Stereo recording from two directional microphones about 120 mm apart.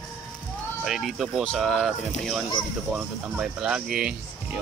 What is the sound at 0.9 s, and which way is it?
Speech, centre (ahead or behind).